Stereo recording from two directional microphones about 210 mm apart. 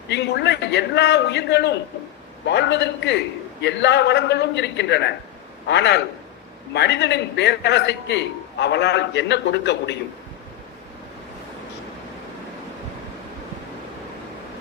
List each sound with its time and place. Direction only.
0.1 s a man's voice: 55° left (ahead or behind)